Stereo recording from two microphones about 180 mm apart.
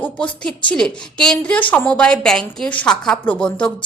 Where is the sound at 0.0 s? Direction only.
5° left (ahead or behind).